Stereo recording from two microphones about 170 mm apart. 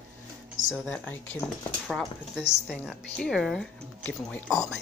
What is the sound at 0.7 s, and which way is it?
Speech, centre (ahead or behind).